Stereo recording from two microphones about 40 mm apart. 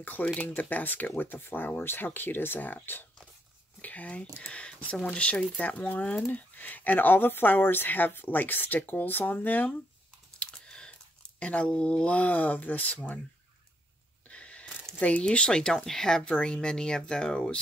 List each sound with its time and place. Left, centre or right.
0.0 s speech: left
1.1 s speech: left
3.8 s speech: left
10.4 s chewing: left
10.9 s a sound: left
12.2 s speech: left
14.2 s a sound: left
15.0 s speech: left